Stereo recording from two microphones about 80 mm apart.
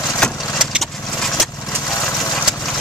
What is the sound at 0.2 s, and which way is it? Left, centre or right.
Vehicle, centre.